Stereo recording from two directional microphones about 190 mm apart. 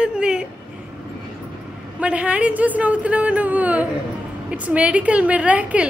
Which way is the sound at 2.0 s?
5° right (ahead or behind).